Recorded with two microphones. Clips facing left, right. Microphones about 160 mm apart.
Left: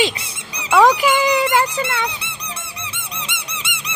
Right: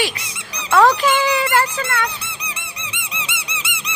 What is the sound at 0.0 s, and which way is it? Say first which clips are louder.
Squeak: left 3 dB; 25° left (ahead or behind).